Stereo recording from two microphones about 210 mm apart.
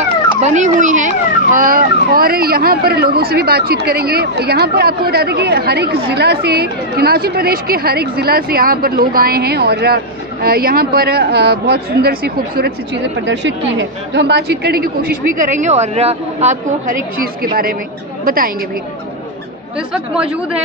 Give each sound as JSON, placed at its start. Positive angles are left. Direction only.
{"t": 0.4, "sound": "speech", "side_deg": -35}
{"t": 13.2, "sound": "a woman's voice", "side_deg": -60}